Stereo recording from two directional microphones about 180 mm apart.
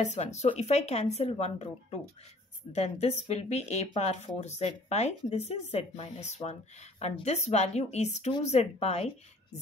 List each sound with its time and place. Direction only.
0.0 s speech: 40° left (ahead or behind)